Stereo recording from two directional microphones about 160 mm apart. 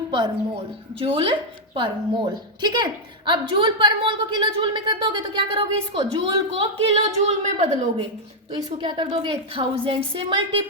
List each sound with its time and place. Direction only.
1.0 s a woman's voice: 35° right (ahead or behind)
8.8 s a woman's voice: 30° right (ahead or behind)